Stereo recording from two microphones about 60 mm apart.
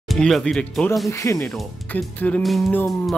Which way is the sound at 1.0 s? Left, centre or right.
Left.